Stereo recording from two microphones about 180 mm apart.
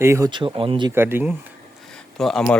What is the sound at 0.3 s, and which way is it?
Speech, 25° right (ahead or behind).